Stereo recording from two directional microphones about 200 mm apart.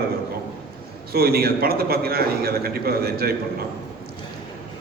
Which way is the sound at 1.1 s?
50° right (ahead or behind).